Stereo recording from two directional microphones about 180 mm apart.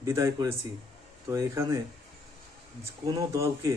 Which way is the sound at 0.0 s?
15° right (ahead or behind).